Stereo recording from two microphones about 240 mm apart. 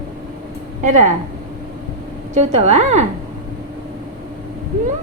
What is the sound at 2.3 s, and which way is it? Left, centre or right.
Speech, right.